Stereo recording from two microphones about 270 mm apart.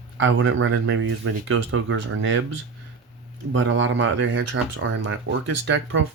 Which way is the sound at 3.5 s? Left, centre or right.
Right.